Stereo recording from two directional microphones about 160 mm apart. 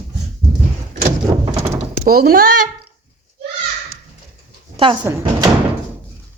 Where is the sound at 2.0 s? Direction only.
70° right (ahead or behind).